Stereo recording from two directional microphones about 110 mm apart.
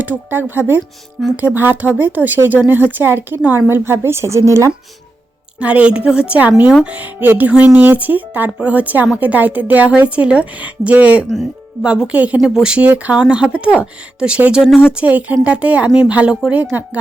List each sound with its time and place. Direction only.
0.0 s a woman's voice: 15° right (ahead or behind)
5.5 s a woman's voice: 10° right (ahead or behind)